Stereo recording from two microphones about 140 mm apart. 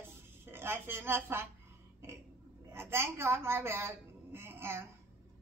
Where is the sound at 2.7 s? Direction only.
15° right (ahead or behind).